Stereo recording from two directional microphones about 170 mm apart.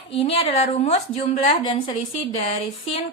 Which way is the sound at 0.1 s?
35° left (ahead or behind).